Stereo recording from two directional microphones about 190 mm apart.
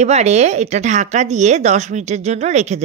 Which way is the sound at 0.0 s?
35° right (ahead or behind).